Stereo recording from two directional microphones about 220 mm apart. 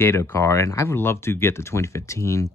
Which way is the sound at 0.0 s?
10° left (ahead or behind).